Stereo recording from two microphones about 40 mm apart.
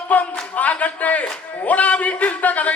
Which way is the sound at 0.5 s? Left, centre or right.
Left.